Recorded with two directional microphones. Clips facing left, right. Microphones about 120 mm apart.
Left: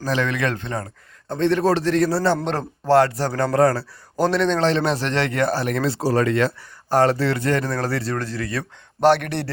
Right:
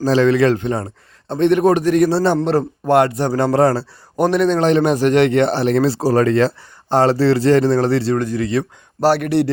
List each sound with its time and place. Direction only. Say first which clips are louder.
0.0 s speech: right 9 dB; 30° right (ahead or behind)
0.5 s a man's voice: right 8 dB; 20° right (ahead or behind)
2.4 s speech: right 8 dB; 5° right (ahead or behind)
2.8 s a man's voice: even; 20° right (ahead or behind)
4.3 s a man's voice: right 5 dB; 10° right (ahead or behind)
9.0 s speech: right 3 dB; 5° right (ahead or behind)